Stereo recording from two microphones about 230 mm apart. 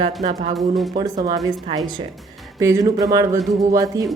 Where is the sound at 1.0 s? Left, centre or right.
Centre.